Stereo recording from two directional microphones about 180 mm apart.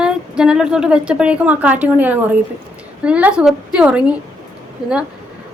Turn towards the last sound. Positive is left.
turn(degrees=20)  # may be behind; listen again after turning